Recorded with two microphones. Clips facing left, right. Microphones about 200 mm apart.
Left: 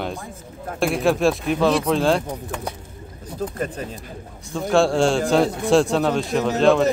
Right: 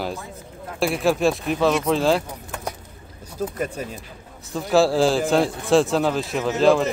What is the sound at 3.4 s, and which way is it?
Speech, 5° right (ahead or behind).